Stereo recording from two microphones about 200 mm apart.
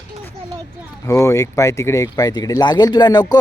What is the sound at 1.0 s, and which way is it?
Speech, 15° left (ahead or behind).